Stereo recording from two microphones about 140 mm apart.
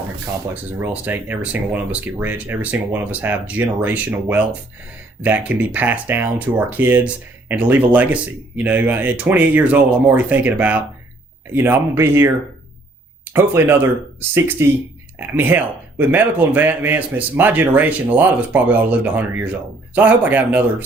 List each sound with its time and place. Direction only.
0.5 s speech: 10° right (ahead or behind)
13.3 s speech: 15° right (ahead or behind)